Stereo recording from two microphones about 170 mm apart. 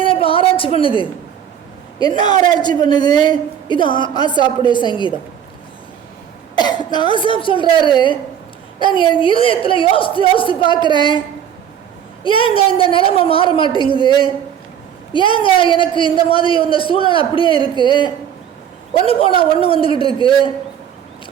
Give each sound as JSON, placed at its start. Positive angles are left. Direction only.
{"t": 0.0, "sound": "a sound", "side_deg": 30}
{"t": 2.0, "sound": "a man's voice", "side_deg": 25}
{"t": 6.6, "sound": "a man's voice", "side_deg": 25}
{"t": 12.2, "sound": "a man's voice", "side_deg": 30}